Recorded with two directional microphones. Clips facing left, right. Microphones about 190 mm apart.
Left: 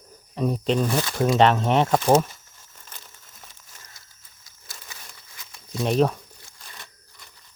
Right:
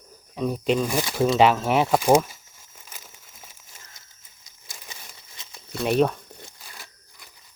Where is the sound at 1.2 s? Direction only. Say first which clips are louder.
Even; 5° right (ahead or behind).